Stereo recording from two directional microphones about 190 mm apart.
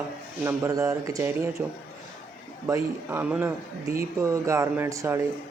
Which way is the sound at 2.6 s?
10° right (ahead or behind).